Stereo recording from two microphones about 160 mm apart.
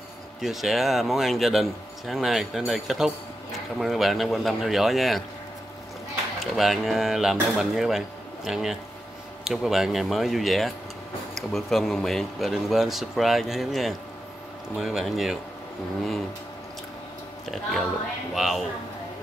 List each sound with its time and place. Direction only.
0.4 s speech: centre (ahead or behind)
6.4 s speech: centre (ahead or behind)
17.5 s speech: centre (ahead or behind)